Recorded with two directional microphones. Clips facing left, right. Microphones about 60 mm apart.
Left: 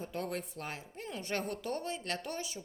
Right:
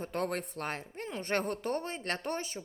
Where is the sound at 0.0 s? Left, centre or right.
Right.